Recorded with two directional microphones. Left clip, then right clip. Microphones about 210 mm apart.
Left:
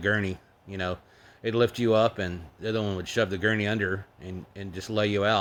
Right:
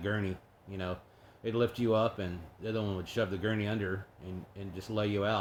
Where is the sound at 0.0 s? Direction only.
40° left (ahead or behind).